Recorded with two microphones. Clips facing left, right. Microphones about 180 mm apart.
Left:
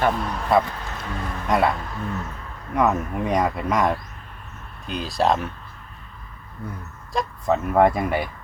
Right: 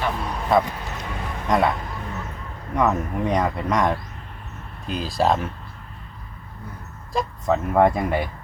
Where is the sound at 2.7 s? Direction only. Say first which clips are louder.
Even; 5° left (ahead or behind).